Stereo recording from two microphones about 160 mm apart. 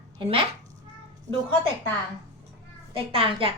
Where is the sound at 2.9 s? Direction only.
35° right (ahead or behind).